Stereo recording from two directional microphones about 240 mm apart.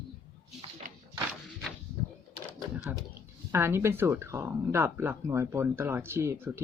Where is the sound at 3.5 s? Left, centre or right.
Centre.